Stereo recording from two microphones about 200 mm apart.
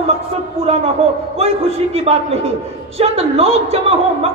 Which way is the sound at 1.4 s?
30° right (ahead or behind).